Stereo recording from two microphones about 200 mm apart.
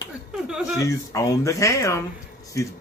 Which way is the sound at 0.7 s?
15° left (ahead or behind).